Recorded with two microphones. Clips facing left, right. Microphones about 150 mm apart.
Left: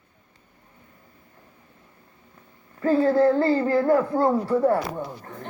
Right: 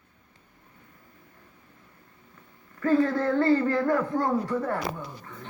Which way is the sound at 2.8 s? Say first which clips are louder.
Left 4 dB; 30° left (ahead or behind).